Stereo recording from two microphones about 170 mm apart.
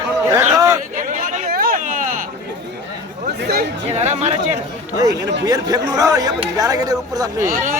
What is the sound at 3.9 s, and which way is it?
Speech, 40° right (ahead or behind).